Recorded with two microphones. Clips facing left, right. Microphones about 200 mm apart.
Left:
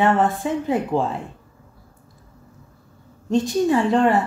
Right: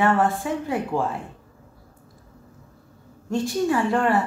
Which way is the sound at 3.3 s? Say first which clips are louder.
Left 4 dB; 20° left (ahead or behind).